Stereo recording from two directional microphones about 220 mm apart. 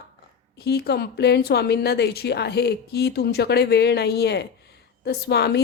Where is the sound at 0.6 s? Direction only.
50° left (ahead or behind).